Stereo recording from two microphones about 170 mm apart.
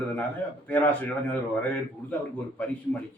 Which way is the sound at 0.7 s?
10° left (ahead or behind).